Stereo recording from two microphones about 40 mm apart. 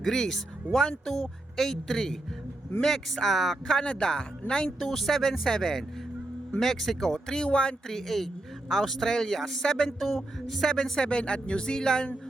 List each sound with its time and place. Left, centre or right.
0.0 s speech: centre
3.8 s speech: centre
4.8 s speech: centre; by 7.8 s left
7.9 s speech: centre